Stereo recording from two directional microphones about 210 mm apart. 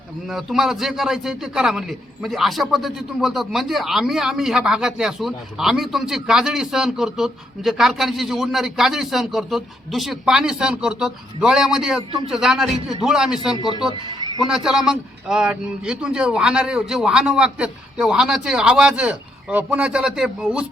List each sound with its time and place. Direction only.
0.3 s a man's voice: centre (ahead or behind)
13.6 s speech: 20° left (ahead or behind)
14.4 s a man's voice: 5° right (ahead or behind)